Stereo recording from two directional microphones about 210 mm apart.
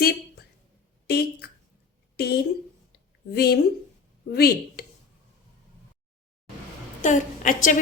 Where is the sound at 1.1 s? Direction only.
50° left (ahead or behind).